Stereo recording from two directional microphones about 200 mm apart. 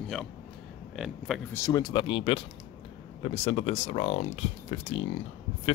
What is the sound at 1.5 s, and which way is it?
Speech, 15° left (ahead or behind).